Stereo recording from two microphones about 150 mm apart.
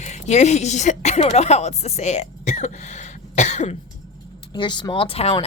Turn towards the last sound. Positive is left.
turn(degrees=40)  # may be behind; listen again after turning